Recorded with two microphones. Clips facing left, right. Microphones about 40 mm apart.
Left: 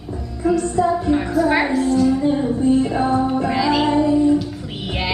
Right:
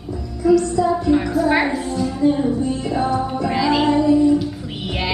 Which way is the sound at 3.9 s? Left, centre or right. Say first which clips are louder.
Right 1 dB; left.